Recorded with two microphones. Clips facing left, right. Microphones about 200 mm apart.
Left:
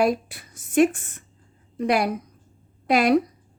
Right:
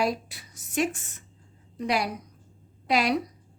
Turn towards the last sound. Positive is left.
turn(degrees=50)  # may be behind; listen again after turning